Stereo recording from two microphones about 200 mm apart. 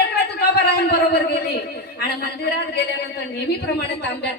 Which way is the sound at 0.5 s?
50° left (ahead or behind).